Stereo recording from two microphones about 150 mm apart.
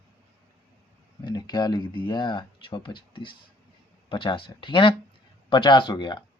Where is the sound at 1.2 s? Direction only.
30° left (ahead or behind).